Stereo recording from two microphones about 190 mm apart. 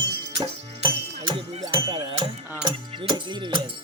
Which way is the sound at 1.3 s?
25° right (ahead or behind).